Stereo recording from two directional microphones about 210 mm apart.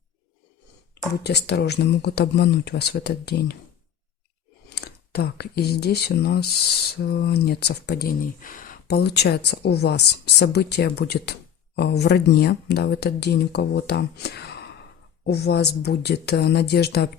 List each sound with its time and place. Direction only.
1.2 s speech: 50° left (ahead or behind)
4.7 s speech: 50° left (ahead or behind)